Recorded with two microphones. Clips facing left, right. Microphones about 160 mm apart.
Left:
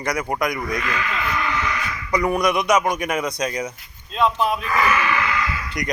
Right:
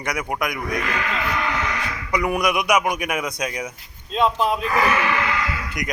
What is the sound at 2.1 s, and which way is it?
A man's voice, 10° right (ahead or behind).